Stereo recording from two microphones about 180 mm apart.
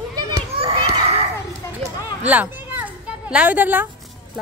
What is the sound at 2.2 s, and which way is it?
Children playing, 10° right (ahead or behind).